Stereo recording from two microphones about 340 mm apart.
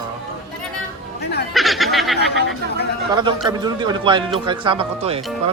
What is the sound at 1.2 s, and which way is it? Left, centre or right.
Speech, left.